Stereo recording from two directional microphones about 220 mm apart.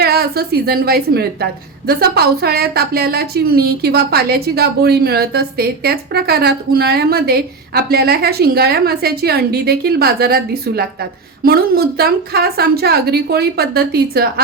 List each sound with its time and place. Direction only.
0.0 s a woman's voice: 45° right (ahead or behind)